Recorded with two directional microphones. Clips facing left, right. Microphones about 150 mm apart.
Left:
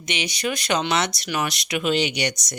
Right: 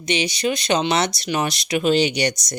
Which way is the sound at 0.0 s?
30° right (ahead or behind).